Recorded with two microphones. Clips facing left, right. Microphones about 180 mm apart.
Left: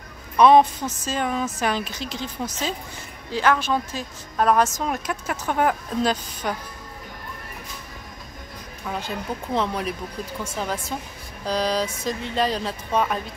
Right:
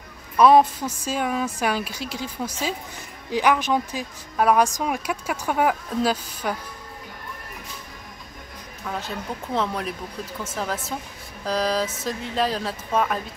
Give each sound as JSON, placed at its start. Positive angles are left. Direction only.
{"t": 0.4, "sound": "a woman's voice", "side_deg": -5}
{"t": 8.8, "sound": "speech", "side_deg": 5}